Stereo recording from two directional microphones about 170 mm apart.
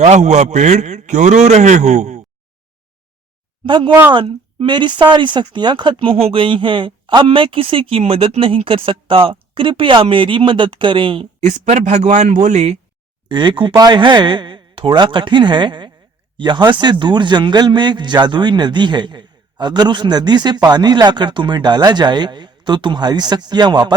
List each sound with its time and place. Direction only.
0.0 s a man's voice: 45° right (ahead or behind)
3.6 s speech: 30° right (ahead or behind)
13.2 s speech: 25° right (ahead or behind)